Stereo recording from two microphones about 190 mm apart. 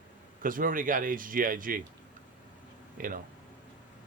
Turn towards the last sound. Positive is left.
turn(degrees=-45)  # may be behind; listen again after turning